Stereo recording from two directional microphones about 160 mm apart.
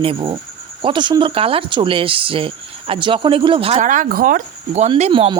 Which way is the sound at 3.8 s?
55° right (ahead or behind).